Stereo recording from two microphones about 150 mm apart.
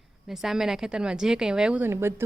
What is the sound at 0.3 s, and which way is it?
A woman's voice, centre (ahead or behind).